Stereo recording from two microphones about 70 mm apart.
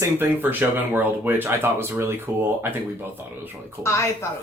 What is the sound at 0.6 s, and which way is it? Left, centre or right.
Speech, right.